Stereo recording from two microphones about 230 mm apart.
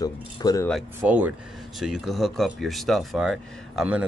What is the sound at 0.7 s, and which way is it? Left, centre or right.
Speech, centre.